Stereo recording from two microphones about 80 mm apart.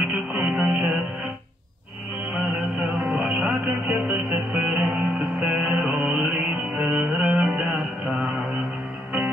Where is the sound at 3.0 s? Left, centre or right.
Centre.